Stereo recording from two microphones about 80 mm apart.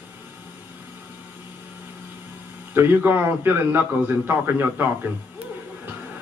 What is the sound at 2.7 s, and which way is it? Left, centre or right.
A man's voice, right.